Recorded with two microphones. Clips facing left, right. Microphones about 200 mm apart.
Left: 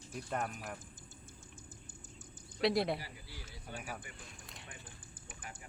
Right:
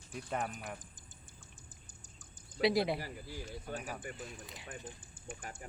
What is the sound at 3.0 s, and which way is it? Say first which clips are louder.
Speech: right 7 dB; 45° right (ahead or behind).